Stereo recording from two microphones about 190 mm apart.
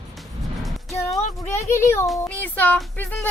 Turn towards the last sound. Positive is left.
turn(degrees=10)  # may be behind; listen again after turning